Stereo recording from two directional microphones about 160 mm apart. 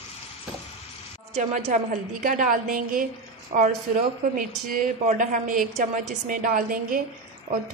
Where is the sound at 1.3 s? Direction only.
45° right (ahead or behind).